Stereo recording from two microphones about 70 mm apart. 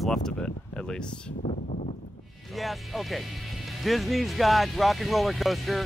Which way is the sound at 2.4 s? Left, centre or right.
Centre.